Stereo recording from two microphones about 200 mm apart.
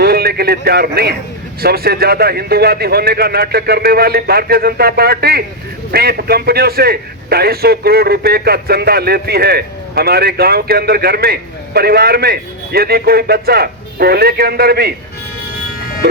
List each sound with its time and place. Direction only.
0.0 s a man's voice: 50° right (ahead or behind)